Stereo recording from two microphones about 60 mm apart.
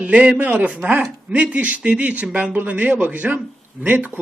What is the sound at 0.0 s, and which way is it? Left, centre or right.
Speech, right.